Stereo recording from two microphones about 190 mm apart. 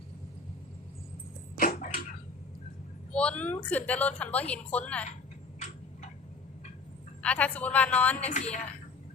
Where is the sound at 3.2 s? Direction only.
5° left (ahead or behind).